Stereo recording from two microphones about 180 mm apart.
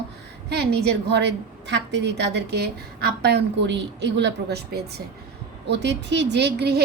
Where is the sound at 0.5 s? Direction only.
65° right (ahead or behind).